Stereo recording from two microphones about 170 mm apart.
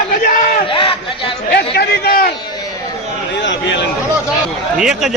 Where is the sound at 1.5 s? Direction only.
70° left (ahead or behind).